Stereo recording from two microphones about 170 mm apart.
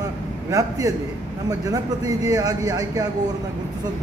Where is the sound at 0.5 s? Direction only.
20° right (ahead or behind).